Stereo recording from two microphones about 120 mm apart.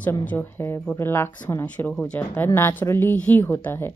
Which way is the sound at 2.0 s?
10° left (ahead or behind).